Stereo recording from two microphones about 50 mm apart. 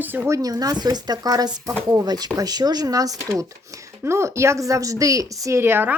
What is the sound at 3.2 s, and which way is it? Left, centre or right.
Speech, right.